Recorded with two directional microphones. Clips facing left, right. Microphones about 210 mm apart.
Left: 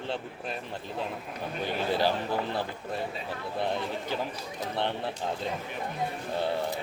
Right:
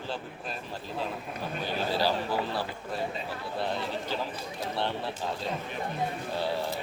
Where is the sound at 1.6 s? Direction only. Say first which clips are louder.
Left 2 dB; 20° left (ahead or behind).